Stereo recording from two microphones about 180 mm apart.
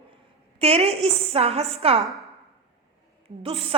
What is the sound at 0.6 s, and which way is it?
A woman's voice, 35° right (ahead or behind).